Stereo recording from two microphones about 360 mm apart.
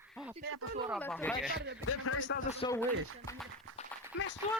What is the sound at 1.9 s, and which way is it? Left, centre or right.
Speech, left.